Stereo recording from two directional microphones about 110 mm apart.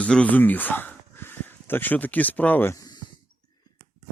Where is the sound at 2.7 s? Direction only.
35° left (ahead or behind).